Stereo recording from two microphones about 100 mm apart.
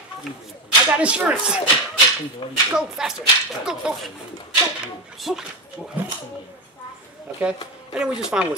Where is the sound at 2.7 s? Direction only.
5° right (ahead or behind).